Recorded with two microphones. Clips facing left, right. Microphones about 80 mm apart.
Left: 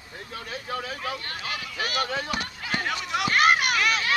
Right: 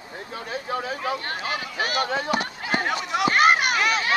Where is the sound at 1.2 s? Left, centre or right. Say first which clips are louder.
Right 5 dB; right.